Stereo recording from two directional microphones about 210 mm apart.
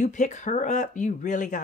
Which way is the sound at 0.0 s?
35° left (ahead or behind).